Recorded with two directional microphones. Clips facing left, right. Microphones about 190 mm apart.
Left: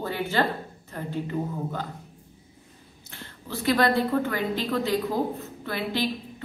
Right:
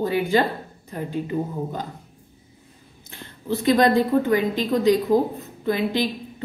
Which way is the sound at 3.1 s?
20° right (ahead or behind).